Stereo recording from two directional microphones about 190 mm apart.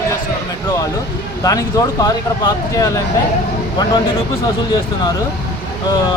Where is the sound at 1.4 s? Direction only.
20° left (ahead or behind).